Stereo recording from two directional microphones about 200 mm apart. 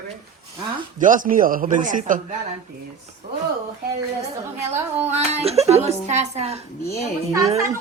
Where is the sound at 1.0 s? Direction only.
40° right (ahead or behind).